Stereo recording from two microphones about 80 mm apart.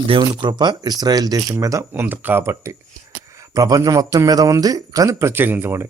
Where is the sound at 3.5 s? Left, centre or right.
Right.